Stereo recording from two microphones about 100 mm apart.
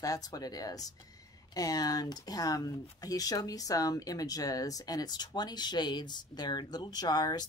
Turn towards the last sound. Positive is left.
turn(degrees=45)  # may be behind; listen again after turning